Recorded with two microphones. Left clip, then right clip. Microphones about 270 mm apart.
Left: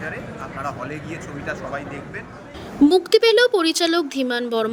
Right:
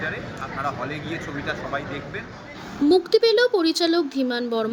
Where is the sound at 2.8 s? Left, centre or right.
Left.